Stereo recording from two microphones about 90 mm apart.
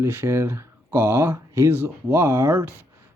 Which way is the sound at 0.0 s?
25° right (ahead or behind).